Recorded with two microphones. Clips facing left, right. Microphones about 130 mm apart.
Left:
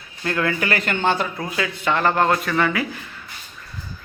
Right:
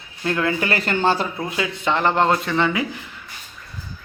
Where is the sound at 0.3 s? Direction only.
20° right (ahead or behind).